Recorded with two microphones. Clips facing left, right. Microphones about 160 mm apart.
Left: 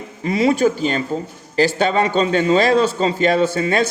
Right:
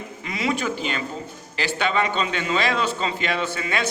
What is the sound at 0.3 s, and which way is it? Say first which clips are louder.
A man's voice: left 10 dB; 40° left (ahead or behind).